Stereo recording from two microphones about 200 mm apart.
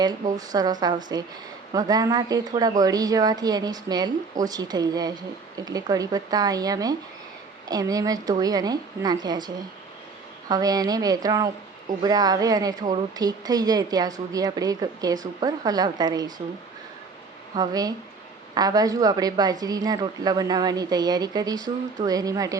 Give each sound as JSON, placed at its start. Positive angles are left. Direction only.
{"t": 0.3, "sound": "a woman's voice", "side_deg": -20}
{"t": 10.5, "sound": "a woman's voice", "side_deg": -20}
{"t": 17.5, "sound": "a woman's voice", "side_deg": -20}